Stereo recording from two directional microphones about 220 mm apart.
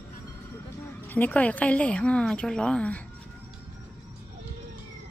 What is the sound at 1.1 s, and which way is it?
Speech, 5° left (ahead or behind).